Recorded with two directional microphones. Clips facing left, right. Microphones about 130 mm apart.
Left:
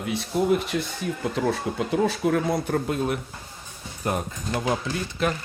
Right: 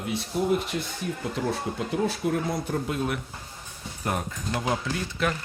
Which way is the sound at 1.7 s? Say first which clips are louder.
Left 3 dB; 70° left (ahead or behind).